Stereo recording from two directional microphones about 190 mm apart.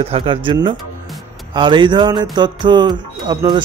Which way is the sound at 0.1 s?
25° right (ahead or behind).